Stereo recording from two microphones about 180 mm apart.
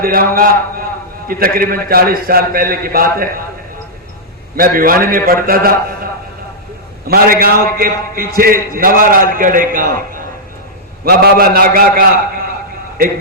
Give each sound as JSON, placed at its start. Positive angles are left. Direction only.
{"t": 0.0, "sound": "a man's voice", "side_deg": -55}
{"t": 4.5, "sound": "a man's voice", "side_deg": -55}
{"t": 7.1, "sound": "a man's voice", "side_deg": -55}
{"t": 11.0, "sound": "a man's voice", "side_deg": -60}